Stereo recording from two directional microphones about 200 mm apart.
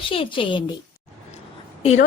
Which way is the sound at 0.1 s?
25° left (ahead or behind).